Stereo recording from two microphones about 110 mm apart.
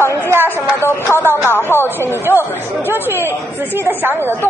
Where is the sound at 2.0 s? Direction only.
20° right (ahead or behind).